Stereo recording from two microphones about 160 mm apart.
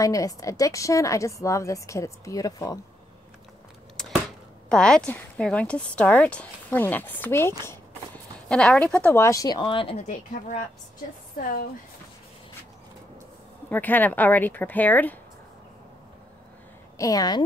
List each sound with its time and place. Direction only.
0.0 s a woman's voice: 20° left (ahead or behind)
3.9 s a sound: 5° left (ahead or behind)
4.6 s speech: 5° left (ahead or behind); by 9.9 s 30° left (ahead or behind)
9.9 s speech: 50° left (ahead or behind)
13.7 s speech: 10° left (ahead or behind)
17.0 s a woman's voice: 25° left (ahead or behind)